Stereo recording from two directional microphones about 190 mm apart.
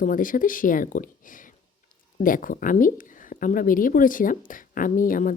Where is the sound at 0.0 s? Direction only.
45° left (ahead or behind).